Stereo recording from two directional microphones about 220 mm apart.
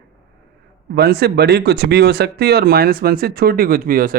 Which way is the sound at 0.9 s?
45° right (ahead or behind).